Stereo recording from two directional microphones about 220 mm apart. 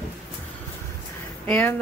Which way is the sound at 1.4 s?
5° left (ahead or behind).